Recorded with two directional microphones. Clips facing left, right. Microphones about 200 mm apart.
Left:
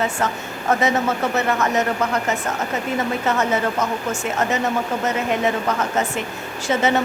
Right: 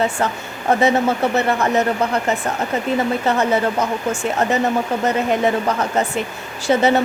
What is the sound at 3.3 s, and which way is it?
Speech, 35° right (ahead or behind).